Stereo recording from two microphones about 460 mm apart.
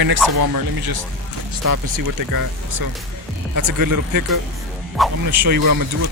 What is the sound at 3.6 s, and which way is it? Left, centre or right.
Speech, right.